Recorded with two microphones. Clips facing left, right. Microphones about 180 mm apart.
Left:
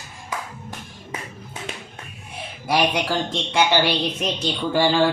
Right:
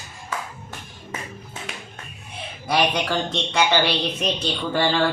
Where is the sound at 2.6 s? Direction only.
5° left (ahead or behind).